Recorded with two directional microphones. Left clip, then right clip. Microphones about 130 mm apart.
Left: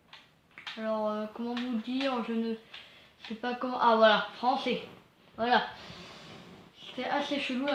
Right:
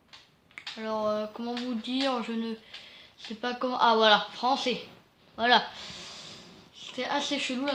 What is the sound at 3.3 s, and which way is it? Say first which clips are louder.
Speech: right 4 dB; 50° right (ahead or behind).